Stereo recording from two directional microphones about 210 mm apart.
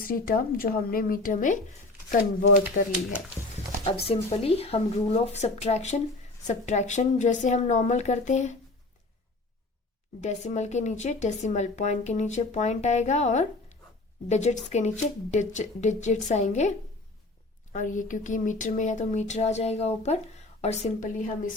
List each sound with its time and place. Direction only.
0.0 s speech: 45° left (ahead or behind)
2.8 s speech: 40° left (ahead or behind)
4.0 s speech: 30° left (ahead or behind)
10.2 s speech: 35° left (ahead or behind)